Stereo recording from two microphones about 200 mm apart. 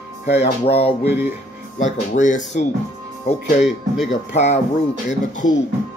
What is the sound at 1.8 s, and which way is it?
Speech, 40° left (ahead or behind).